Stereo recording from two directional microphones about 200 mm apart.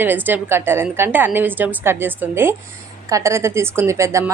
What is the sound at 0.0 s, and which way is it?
A woman's voice, 10° right (ahead or behind).